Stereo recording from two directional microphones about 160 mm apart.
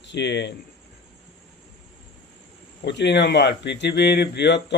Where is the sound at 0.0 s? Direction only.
90° left.